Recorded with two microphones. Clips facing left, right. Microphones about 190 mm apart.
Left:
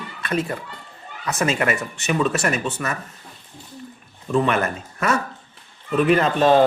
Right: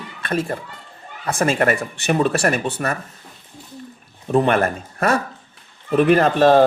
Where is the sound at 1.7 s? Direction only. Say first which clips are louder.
Right 3 dB; 35° right (ahead or behind).